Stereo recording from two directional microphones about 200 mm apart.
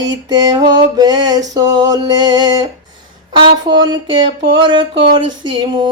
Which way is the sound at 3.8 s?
20° right (ahead or behind).